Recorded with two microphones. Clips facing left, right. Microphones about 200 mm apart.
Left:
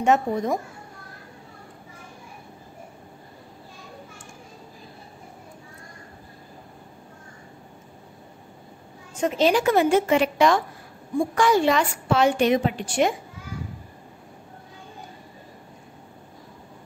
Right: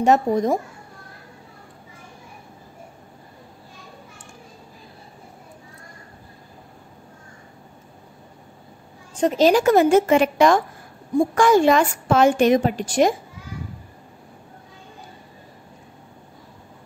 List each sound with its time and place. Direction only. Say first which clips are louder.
0.0 s speech: right 4 dB; 40° right (ahead or behind)
9.1 s a woman's voice: right 4 dB; 35° right (ahead or behind)